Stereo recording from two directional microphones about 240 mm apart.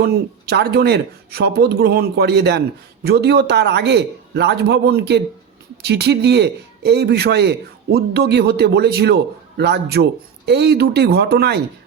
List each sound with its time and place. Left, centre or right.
0.0 s speech: right